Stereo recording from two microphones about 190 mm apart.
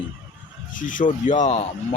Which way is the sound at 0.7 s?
45° left (ahead or behind).